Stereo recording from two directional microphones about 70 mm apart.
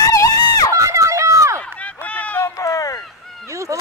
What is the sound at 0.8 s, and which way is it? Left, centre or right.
Run, right.